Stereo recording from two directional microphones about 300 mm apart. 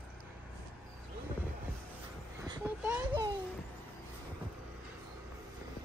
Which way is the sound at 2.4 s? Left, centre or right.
Centre.